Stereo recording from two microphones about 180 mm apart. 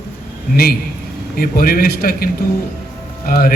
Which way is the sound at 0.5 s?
55° left (ahead or behind).